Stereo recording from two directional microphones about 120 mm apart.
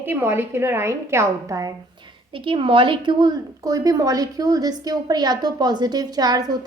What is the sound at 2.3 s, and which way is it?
A woman's voice, 45° right (ahead or behind).